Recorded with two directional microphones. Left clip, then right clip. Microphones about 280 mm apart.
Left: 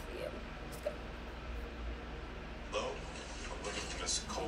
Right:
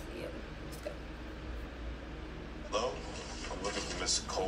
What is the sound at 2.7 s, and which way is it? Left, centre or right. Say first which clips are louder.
Speech: right 5 dB; right.